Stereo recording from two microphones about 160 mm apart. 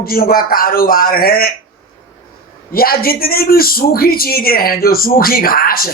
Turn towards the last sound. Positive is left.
turn(degrees=65)  # may be behind; listen again after turning